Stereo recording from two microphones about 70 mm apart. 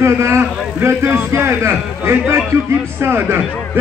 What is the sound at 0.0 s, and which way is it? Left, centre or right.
A man's voice, right.